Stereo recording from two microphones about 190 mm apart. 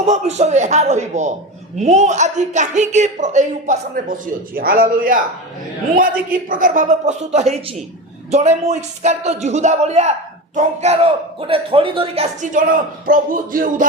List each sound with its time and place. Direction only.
0.1 s a woman's voice: 35° right (ahead or behind)
6.5 s a woman's voice: 45° right (ahead or behind)